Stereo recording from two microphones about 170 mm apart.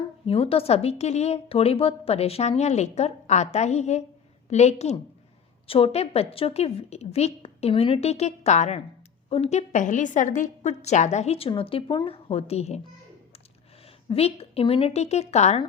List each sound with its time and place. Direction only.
0.3 s a woman's voice: 35° left (ahead or behind)
14.1 s a woman's voice: 35° left (ahead or behind)